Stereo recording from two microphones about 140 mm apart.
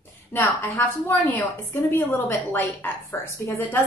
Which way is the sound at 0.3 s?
15° left (ahead or behind).